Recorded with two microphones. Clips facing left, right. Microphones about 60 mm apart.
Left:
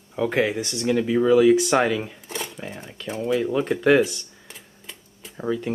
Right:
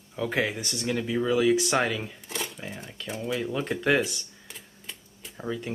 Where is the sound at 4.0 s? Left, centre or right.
Centre.